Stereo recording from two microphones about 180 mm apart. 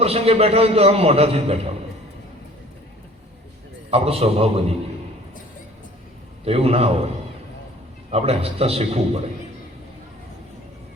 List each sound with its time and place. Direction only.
0.0 s a man's voice: 35° right (ahead or behind)
3.9 s a man's voice: 35° right (ahead or behind)
6.4 s a man's voice: 35° right (ahead or behind)
8.1 s a man's voice: 35° right (ahead or behind)